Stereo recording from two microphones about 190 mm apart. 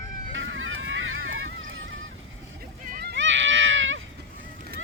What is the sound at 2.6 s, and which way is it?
Vehicle, 50° right (ahead or behind).